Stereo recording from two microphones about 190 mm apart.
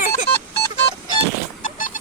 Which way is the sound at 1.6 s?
45° left (ahead or behind).